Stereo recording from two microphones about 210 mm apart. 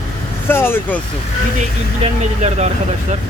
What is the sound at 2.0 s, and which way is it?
Speech, 30° right (ahead or behind).